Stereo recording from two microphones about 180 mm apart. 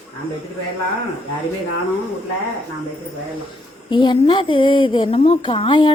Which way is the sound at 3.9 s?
25° left (ahead or behind).